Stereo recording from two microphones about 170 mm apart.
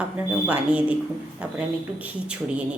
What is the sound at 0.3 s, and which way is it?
Speech, 10° right (ahead or behind).